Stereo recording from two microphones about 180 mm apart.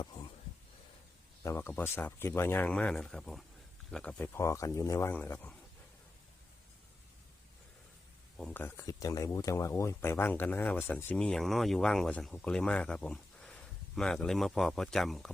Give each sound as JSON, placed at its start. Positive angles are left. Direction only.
{"t": 0.0, "sound": "a sound", "side_deg": 25}
{"t": 1.5, "sound": "speech", "side_deg": 10}
{"t": 8.4, "sound": "speech", "side_deg": 10}